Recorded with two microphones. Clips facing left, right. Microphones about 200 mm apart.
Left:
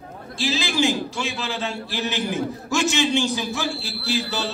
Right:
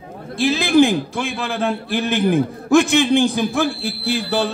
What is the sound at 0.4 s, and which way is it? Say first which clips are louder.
A man's voice: right 9 dB; 55° right (ahead or behind).